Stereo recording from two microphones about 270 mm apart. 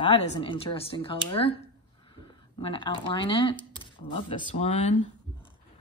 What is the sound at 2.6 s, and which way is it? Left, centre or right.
A woman's voice, centre.